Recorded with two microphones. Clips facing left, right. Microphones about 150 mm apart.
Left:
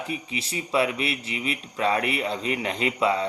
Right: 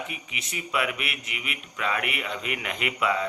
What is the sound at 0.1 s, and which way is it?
Speech, 30° left (ahead or behind).